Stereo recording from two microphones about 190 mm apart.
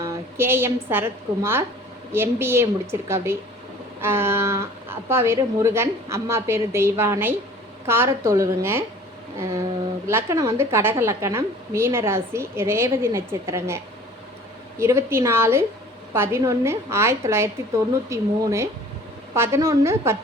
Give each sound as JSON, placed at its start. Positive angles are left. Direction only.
{"t": 0.0, "sound": "a woman's voice", "side_deg": -15}
{"t": 10.1, "sound": "a woman's voice", "side_deg": -15}